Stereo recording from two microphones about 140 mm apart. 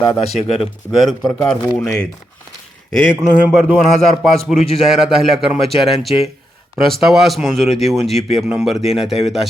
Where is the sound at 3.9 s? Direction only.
Centre (ahead or behind).